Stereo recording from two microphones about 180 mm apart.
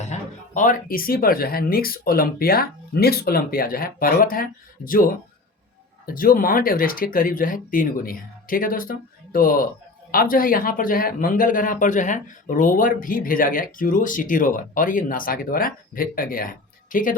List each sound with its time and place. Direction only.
0.0 s speech: 40° left (ahead or behind)